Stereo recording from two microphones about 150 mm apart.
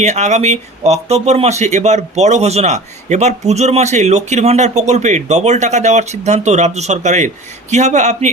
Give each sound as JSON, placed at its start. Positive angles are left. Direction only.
{"t": 0.0, "sound": "speech", "side_deg": -50}